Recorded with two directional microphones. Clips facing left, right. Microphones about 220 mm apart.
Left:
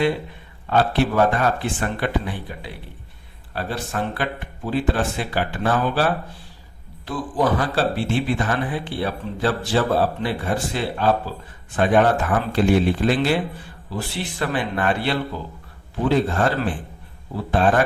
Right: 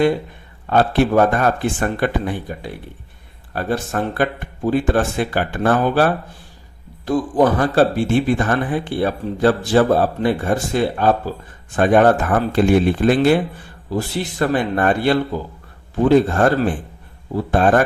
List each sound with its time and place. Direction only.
0.7 s speech: 45° right (ahead or behind)
17.5 s speech: 45° right (ahead or behind)